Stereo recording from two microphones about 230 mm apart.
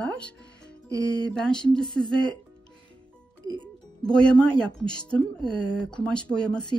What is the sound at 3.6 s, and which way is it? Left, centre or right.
Speech, centre.